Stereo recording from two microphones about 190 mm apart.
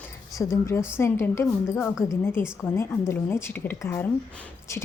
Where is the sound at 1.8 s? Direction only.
Centre (ahead or behind).